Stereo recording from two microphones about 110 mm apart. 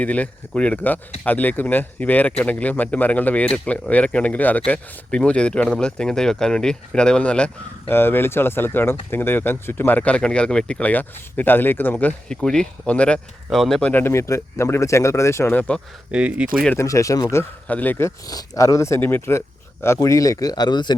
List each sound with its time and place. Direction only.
0.0 s speech: 15° left (ahead or behind)
13.9 s speech: 25° left (ahead or behind)
16.1 s speech: 10° right (ahead or behind)
16.7 s speech: 30° left (ahead or behind)
17.7 s speech: 15° left (ahead or behind)
18.3 s speech: 30° left (ahead or behind)